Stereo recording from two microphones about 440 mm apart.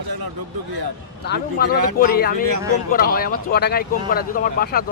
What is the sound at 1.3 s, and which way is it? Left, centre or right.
Speech, left.